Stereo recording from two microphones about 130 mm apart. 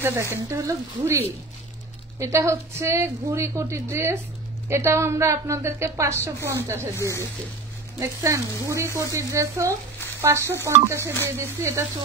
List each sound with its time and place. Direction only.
0.0 s a woman's voice: 20° right (ahead or behind)
8.0 s a woman's voice: 25° right (ahead or behind)